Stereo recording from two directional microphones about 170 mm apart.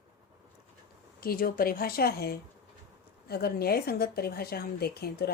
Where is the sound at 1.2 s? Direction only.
60° left (ahead or behind).